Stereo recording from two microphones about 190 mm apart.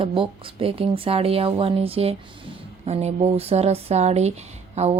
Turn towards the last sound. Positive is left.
turn(degrees=-35)  # may be behind; listen again after turning